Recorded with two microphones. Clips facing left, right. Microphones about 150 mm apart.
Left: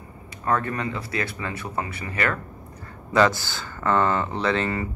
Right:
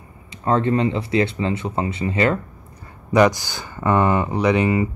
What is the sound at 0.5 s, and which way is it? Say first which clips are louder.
Speech: right 7 dB; 25° right (ahead or behind).